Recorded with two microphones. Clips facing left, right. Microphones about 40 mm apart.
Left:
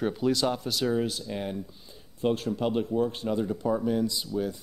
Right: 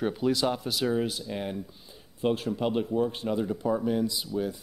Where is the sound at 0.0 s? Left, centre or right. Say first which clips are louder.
Even; centre.